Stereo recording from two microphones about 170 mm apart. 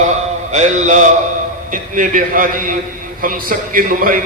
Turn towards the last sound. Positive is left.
turn(degrees=-55)  # may be behind; listen again after turning